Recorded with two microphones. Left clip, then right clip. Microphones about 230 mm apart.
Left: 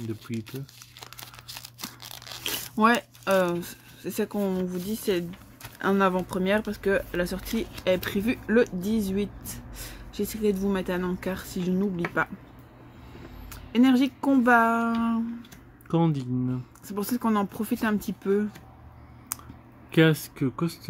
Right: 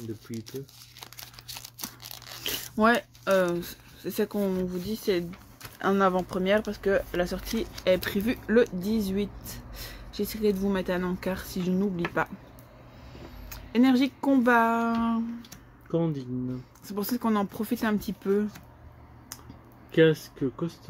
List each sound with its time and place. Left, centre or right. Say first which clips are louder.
0.3 s speech: left 5 dB; left
1.0 s crumpling: left 1 dB; centre
5.8 s speech: even; centre
13.5 s speech: left 1 dB; centre
15.9 s speech: left 2 dB; left
16.8 s speech: left 1 dB; centre
19.9 s speech: right 1 dB; left